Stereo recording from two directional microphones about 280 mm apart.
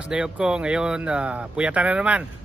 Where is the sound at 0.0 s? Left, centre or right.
Centre.